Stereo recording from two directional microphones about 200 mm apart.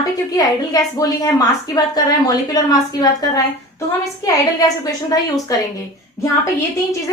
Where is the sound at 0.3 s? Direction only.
20° left (ahead or behind).